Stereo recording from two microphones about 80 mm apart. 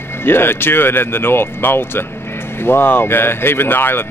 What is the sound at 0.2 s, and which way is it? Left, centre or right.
Speech, left.